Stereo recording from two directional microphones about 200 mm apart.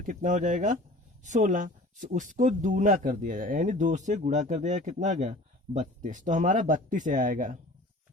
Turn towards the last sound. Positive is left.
turn(degrees=-40)  # may be behind; listen again after turning